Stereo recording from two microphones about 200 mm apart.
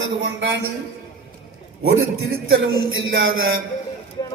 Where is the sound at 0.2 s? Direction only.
60° right (ahead or behind).